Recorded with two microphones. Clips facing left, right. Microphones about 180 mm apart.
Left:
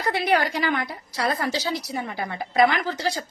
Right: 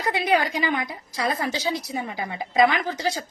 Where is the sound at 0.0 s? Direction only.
20° right (ahead or behind).